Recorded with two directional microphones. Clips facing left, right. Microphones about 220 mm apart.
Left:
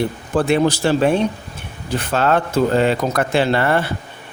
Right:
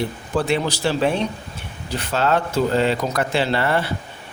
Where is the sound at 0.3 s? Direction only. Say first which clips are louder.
Left 5 dB; 50° left (ahead or behind).